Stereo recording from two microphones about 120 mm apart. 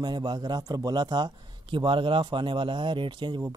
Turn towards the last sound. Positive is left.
turn(degrees=-40)  # may be behind; listen again after turning